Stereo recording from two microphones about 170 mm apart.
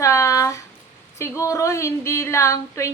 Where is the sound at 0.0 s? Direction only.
15° left (ahead or behind).